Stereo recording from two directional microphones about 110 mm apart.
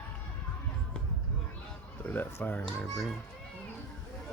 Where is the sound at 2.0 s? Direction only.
15° left (ahead or behind).